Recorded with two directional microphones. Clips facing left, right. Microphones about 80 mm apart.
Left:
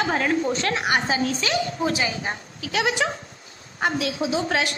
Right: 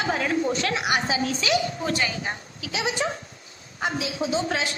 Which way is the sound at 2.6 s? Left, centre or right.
Left.